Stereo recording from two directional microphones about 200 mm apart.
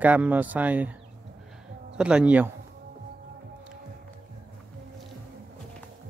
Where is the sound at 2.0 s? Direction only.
5° right (ahead or behind).